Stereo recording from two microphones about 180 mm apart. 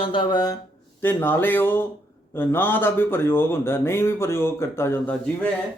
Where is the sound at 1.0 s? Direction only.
10° left (ahead or behind).